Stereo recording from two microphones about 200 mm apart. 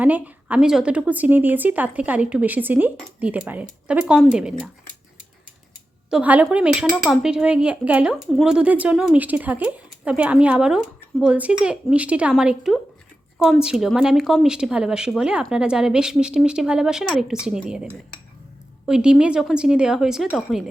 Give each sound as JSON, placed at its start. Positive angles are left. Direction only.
{"t": 0.0, "sound": "a woman's voice", "side_deg": -10}
{"t": 6.1, "sound": "speech", "side_deg": -5}